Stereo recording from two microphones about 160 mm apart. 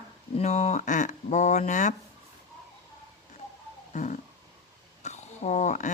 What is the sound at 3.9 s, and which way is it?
Roaring cats, 50° left (ahead or behind).